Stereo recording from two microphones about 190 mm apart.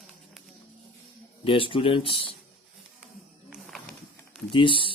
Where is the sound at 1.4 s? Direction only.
30° left (ahead or behind).